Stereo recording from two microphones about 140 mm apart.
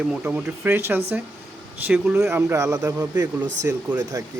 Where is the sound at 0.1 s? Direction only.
10° right (ahead or behind).